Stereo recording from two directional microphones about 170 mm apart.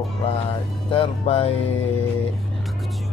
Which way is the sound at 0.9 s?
35° left (ahead or behind).